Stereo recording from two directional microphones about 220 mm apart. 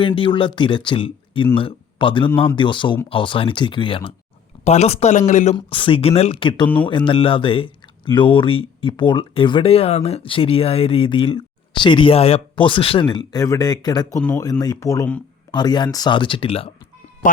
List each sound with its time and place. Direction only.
0.0 s speech: 25° left (ahead or behind)
14.2 s speech: 5° left (ahead or behind); by 16.7 s 25° left (ahead or behind)